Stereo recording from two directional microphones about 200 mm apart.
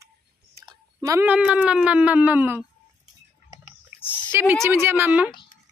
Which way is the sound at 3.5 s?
15° right (ahead or behind).